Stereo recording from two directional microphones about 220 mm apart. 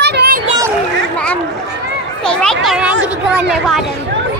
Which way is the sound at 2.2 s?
Centre (ahead or behind).